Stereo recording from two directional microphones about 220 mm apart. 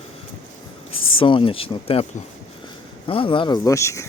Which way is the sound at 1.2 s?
25° left (ahead or behind).